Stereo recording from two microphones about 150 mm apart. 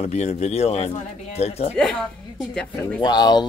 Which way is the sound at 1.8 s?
5° left (ahead or behind).